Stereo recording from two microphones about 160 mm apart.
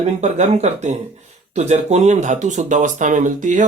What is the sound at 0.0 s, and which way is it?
Speech, 45° right (ahead or behind).